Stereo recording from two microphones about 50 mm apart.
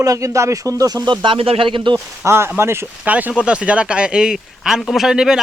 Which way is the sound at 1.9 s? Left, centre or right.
Right.